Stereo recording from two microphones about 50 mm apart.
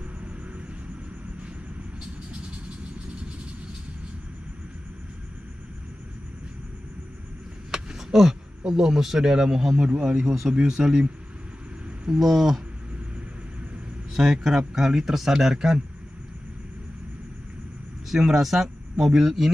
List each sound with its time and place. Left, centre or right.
7.7 s speech: centre
12.2 s speech: centre
14.1 s speech: centre
18.1 s speech: centre